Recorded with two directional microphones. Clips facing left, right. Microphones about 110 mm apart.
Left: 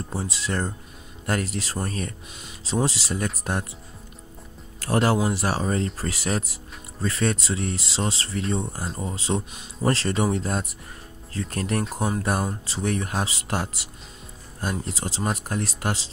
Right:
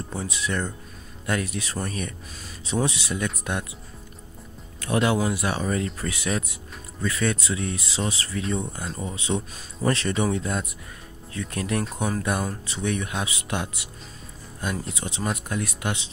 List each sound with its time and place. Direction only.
0.1 s speech: 30° left (ahead or behind)
4.7 s speech: 35° left (ahead or behind)
9.5 s speech: 15° left (ahead or behind)
9.8 s speech: 30° left (ahead or behind)